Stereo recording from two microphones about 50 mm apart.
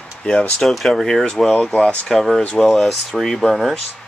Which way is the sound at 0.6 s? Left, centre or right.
Centre.